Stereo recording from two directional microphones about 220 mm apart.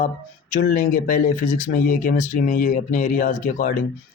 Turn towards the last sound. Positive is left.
turn(degrees=35)  # may be behind; listen again after turning